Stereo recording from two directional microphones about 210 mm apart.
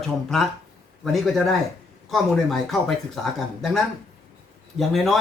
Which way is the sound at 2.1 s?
Centre (ahead or behind).